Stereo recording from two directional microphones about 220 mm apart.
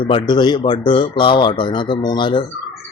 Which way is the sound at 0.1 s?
20° left (ahead or behind).